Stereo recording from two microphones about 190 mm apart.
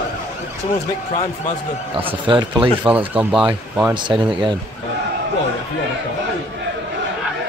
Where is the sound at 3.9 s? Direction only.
25° right (ahead or behind).